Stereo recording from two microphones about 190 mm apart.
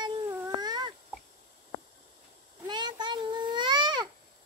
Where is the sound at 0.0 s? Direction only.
20° right (ahead or behind).